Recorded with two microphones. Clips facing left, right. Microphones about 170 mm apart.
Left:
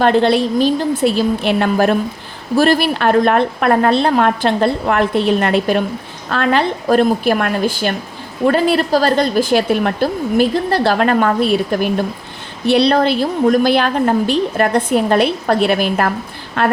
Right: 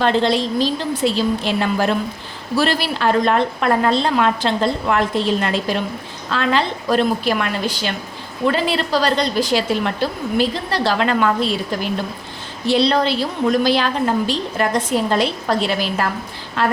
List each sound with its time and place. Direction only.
0.0 s a woman's voice: 55° left (ahead or behind)